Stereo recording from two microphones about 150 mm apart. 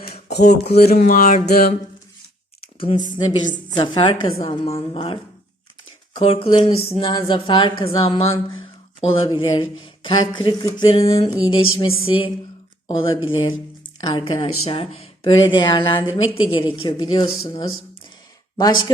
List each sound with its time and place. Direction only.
0.1 s a sound: 90° left
0.4 s speech: 45° left (ahead or behind)
0.9 s music: 65° left (ahead or behind); by 1.7 s 90° left
3.8 s speech: 35° left (ahead or behind)